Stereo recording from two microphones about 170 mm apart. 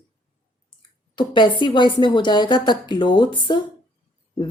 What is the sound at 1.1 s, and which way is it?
A woman's voice, 25° left (ahead or behind).